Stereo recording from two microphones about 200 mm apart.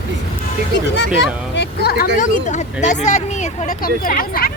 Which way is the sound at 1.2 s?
60° left (ahead or behind).